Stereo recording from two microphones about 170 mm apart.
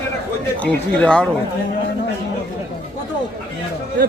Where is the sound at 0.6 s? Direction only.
5° left (ahead or behind).